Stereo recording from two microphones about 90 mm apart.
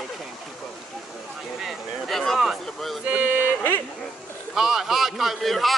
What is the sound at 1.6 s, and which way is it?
Speech, centre (ahead or behind).